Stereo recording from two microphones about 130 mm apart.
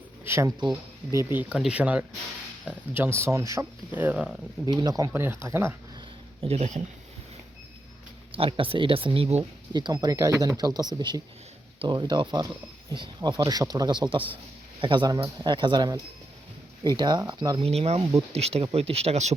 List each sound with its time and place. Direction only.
0.3 s speech: 20° right (ahead or behind)
4.6 s speech: 30° right (ahead or behind)
6.4 s speech: 55° right (ahead or behind)
8.3 s speech: 45° right (ahead or behind)
9.4 s speech: 30° right (ahead or behind)
17.0 s speech: 35° right (ahead or behind)
17.6 s speech: 50° right (ahead or behind)